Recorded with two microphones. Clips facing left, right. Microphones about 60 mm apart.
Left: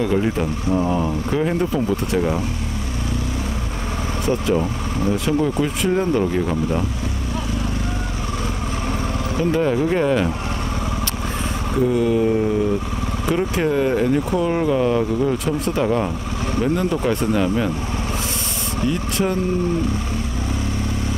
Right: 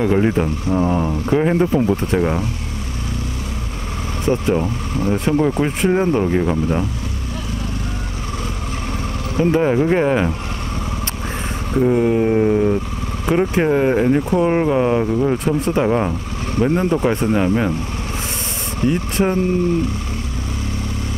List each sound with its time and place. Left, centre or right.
0.0 s speech: right
4.5 s speech: right
5.9 s speech: right
9.4 s speech: right
11.7 s speech: right
18.8 s speech: right